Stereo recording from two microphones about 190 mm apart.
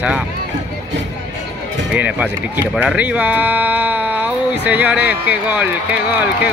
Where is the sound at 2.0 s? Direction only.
10° right (ahead or behind).